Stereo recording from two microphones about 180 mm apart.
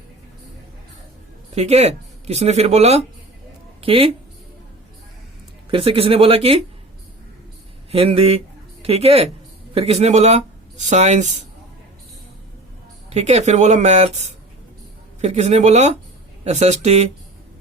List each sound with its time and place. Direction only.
1.5 s speech: 35° right (ahead or behind)
5.7 s speech: 30° right (ahead or behind)
7.9 s speech: 35° right (ahead or behind)
13.1 s speech: 35° right (ahead or behind)